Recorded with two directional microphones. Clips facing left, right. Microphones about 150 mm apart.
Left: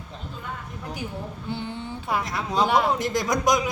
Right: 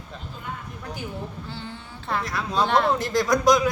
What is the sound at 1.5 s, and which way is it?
A man's voice, 15° left (ahead or behind).